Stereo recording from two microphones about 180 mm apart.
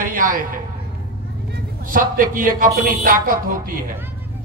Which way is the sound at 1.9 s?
50° right (ahead or behind).